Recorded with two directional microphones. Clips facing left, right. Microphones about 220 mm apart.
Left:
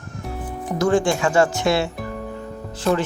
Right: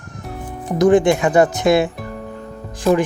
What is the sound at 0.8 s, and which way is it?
Speech, 20° right (ahead or behind).